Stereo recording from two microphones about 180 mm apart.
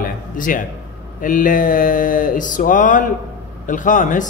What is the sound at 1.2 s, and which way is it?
A man's voice, 50° left (ahead or behind).